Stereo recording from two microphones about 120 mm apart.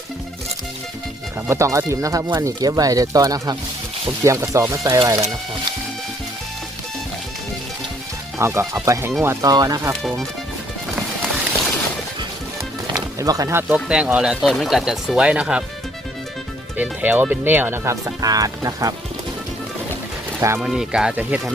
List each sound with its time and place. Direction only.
1.5 s speech: 25° right (ahead or behind)
8.4 s speech: 20° right (ahead or behind)
9.9 s speech: centre (ahead or behind)
12.9 s speech: 30° right (ahead or behind)
13.7 s speech: 5° right (ahead or behind)
16.7 s speech: 15° right (ahead or behind); by 18.9 s 30° right (ahead or behind)
20.6 s speech: 5° right (ahead or behind)